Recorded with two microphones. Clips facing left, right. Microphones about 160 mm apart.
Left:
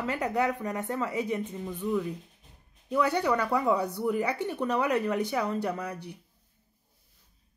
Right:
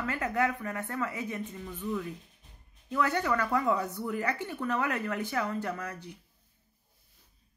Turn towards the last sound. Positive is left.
turn(degrees=15)  # may be behind; listen again after turning